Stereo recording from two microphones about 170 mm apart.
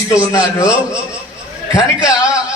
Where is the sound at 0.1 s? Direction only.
20° left (ahead or behind).